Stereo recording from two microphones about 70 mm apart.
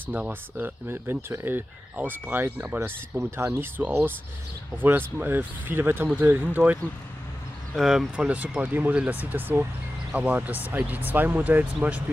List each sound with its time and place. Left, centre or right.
0.1 s speech: right
3.2 s speech: right
7.7 s speech: centre
8.3 s speech: right